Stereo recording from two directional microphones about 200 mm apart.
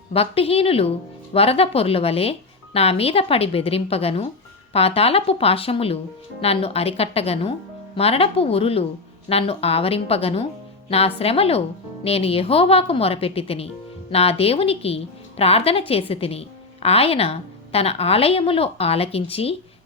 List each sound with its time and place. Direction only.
0.1 s a woman's voice: 30° left (ahead or behind)